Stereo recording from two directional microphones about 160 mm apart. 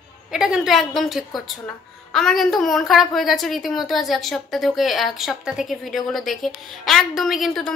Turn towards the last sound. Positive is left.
turn(degrees=0)  # may be behind; listen again after turning